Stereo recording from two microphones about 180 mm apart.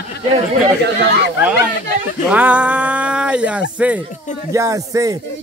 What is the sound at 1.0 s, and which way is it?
Speech, 65° right (ahead or behind).